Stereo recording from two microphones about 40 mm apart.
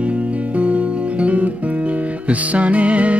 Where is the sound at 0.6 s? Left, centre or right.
Right.